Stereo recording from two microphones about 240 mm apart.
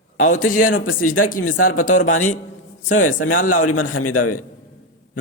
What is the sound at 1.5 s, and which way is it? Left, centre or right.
Speech, left.